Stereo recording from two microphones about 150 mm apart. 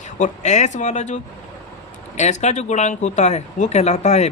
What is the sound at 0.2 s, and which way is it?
Speech, 50° left (ahead or behind).